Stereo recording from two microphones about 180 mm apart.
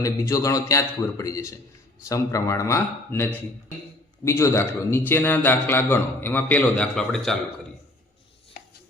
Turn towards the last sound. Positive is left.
turn(degrees=5)  # may be behind; listen again after turning